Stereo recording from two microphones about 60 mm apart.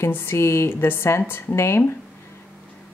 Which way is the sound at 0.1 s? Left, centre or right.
Left.